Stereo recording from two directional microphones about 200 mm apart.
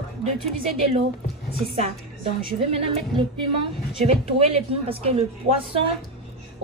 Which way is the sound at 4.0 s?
30° right (ahead or behind).